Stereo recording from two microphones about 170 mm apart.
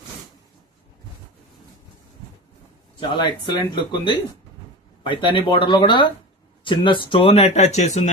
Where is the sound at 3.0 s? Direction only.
25° left (ahead or behind).